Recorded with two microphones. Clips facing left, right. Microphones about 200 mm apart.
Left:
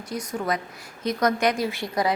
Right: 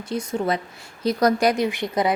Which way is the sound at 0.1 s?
25° right (ahead or behind).